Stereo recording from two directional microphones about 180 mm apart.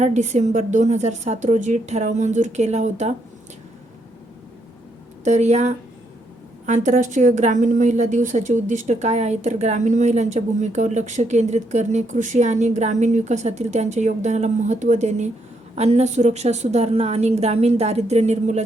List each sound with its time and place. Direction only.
0.0 s a woman's voice: 40° right (ahead or behind)
5.2 s a woman's voice: 40° right (ahead or behind)